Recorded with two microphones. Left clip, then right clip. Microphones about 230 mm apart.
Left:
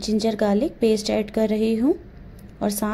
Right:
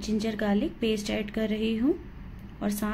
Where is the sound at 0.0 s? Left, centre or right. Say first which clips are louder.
Left 8 dB; left.